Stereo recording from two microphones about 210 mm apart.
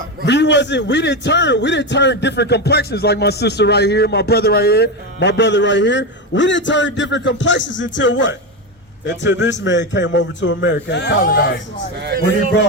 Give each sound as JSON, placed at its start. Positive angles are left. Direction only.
{"t": 0.3, "sound": "a man's voice", "side_deg": 55}
{"t": 9.4, "sound": "a man's voice", "side_deg": 60}
{"t": 11.2, "sound": "a man's voice", "side_deg": 45}